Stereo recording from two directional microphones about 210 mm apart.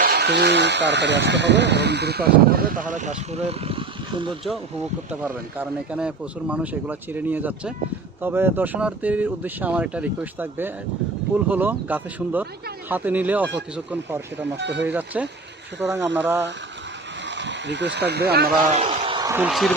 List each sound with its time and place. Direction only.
0.0 s speech: 50° right (ahead or behind); by 4.4 s 25° right (ahead or behind)
5.2 s speech: 5° right (ahead or behind)
14.6 s speech: 55° right (ahead or behind)
14.8 s speech: 10° right (ahead or behind)
17.2 s speech: 60° right (ahead or behind)
18.7 s a sound: 30° right (ahead or behind)
19.4 s speech: centre (ahead or behind)